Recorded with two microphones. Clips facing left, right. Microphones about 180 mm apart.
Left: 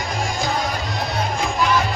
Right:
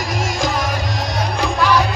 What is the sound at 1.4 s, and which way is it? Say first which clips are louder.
Music: right 4 dB; 70° right (ahead or behind).